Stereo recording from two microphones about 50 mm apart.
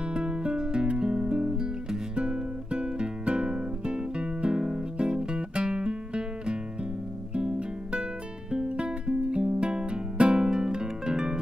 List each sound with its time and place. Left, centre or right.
0.1 s music: centre